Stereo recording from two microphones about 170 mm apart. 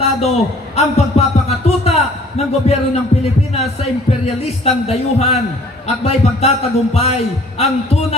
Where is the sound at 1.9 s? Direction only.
40° left (ahead or behind).